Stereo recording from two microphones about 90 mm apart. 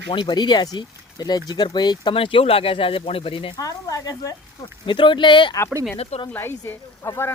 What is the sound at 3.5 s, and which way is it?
Speech, 40° left (ahead or behind).